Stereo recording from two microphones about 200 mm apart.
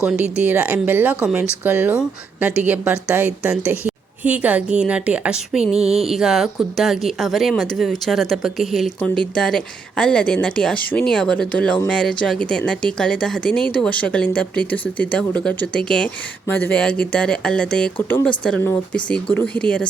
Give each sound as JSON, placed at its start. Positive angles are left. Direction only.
{"t": 0.0, "sound": "a woman's voice", "side_deg": -5}